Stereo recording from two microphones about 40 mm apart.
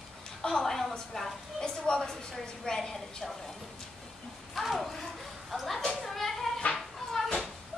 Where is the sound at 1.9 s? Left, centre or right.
Centre.